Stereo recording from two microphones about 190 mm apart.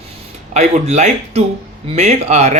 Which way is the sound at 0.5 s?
35° right (ahead or behind).